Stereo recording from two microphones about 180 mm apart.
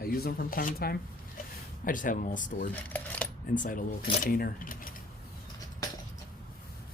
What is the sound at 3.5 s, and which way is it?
Speech, 45° left (ahead or behind).